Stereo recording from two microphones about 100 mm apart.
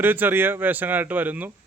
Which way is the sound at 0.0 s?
20° right (ahead or behind).